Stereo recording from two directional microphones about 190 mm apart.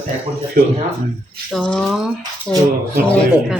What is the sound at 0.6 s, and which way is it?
Speech, 50° right (ahead or behind).